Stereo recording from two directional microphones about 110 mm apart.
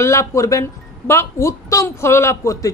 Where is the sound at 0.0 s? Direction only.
25° left (ahead or behind).